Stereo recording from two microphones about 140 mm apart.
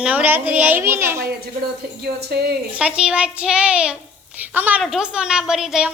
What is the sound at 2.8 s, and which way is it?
A child's voice, 5° right (ahead or behind).